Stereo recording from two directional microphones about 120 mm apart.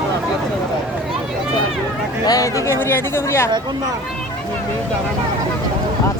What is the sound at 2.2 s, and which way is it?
Speech, 30° left (ahead or behind).